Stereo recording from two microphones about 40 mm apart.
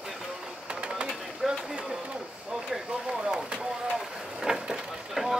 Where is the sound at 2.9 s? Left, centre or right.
Centre.